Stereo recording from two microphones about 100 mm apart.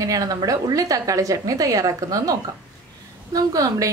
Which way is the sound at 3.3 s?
35° right (ahead or behind).